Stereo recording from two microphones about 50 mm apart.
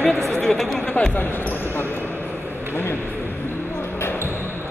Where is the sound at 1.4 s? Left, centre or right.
Left.